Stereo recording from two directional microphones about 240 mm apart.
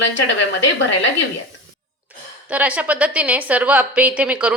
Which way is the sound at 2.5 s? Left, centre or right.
Centre.